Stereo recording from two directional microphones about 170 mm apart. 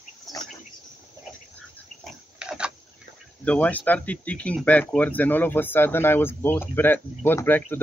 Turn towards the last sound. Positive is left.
turn(degrees=10)  # may be behind; listen again after turning